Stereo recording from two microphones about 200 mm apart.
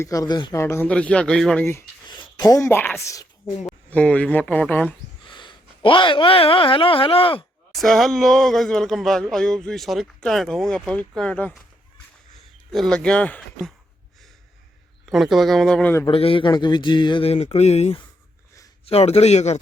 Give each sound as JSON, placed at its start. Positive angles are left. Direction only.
{"t": 0.0, "sound": "a woman's voice", "side_deg": 15}
{"t": 5.3, "sound": "speech", "side_deg": 25}
{"t": 7.8, "sound": "speech", "side_deg": 0}
{"t": 12.7, "sound": "speech", "side_deg": 5}
{"t": 15.1, "sound": "speech", "side_deg": 0}
{"t": 16.0, "sound": "a man's voice", "side_deg": 25}